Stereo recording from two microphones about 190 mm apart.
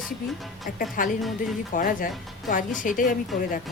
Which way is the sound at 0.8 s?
45° left (ahead or behind).